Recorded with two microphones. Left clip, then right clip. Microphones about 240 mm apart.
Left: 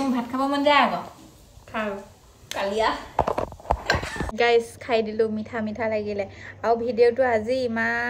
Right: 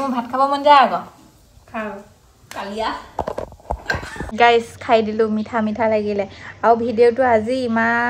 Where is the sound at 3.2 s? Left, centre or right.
Centre.